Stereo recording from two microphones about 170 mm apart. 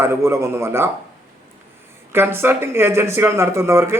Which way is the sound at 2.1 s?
15° right (ahead or behind).